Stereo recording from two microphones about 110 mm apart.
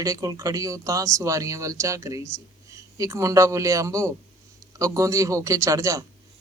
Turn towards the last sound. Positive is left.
turn(degrees=-30)  # may be behind; listen again after turning